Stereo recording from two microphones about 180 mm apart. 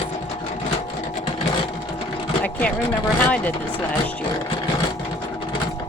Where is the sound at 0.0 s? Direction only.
40° left (ahead or behind).